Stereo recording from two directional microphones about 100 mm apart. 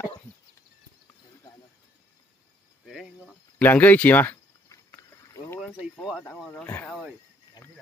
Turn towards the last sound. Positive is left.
turn(degrees=20)  # may be behind; listen again after turning